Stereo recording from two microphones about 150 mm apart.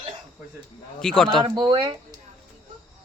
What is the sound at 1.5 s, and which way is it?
Speech, 30° right (ahead or behind).